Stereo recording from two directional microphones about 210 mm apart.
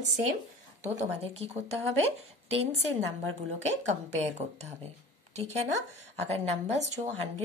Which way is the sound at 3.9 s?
35° right (ahead or behind).